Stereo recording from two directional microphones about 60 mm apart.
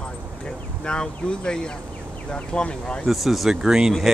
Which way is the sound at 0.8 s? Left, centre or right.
Centre.